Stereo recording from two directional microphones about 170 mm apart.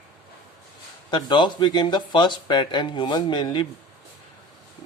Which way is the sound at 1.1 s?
25° left (ahead or behind).